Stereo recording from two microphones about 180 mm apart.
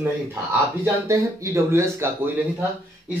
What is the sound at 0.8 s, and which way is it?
A man's voice, 15° right (ahead or behind).